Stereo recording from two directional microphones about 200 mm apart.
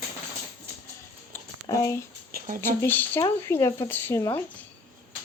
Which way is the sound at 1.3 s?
15° left (ahead or behind).